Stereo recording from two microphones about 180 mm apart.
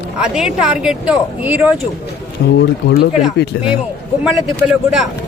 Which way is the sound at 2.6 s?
65° left (ahead or behind).